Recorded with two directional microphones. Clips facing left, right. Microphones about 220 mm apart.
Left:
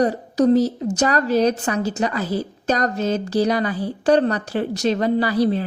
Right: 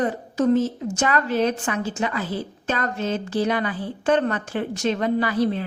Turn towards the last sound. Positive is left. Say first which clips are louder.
# left 3 dB
turn(degrees=35)  # may be behind; listen again after turning